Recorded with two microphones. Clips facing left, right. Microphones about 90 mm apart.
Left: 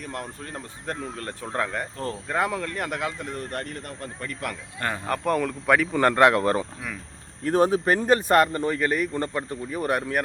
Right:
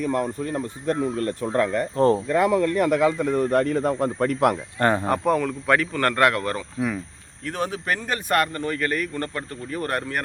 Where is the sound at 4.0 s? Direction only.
90° right.